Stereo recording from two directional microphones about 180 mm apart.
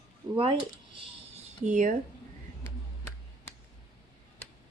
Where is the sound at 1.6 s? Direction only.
45° right (ahead or behind).